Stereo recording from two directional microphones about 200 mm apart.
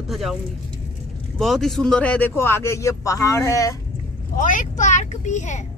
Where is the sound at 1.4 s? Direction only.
Centre (ahead or behind).